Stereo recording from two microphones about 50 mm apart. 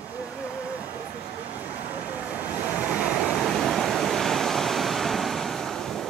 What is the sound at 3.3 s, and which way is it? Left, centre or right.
Waves, centre.